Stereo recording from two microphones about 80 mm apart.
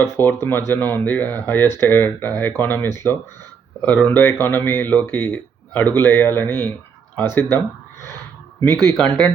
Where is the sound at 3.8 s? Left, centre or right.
Centre.